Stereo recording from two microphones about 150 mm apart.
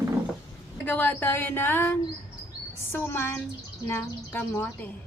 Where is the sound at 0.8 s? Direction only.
15° left (ahead or behind).